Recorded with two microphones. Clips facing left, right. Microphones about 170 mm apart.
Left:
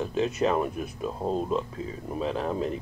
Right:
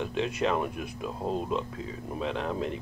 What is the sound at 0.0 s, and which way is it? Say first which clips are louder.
Speech: left 3 dB; 40° left (ahead or behind).